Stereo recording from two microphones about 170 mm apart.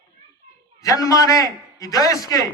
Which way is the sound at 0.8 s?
20° left (ahead or behind).